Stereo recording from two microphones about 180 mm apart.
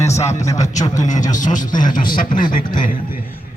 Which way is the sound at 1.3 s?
45° left (ahead or behind).